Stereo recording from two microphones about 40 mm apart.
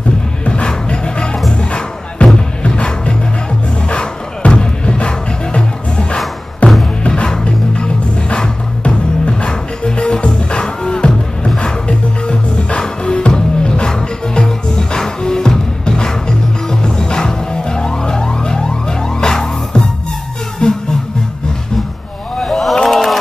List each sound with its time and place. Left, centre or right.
0.5 s music: left
4.4 s music: left
22.4 s a sound: centre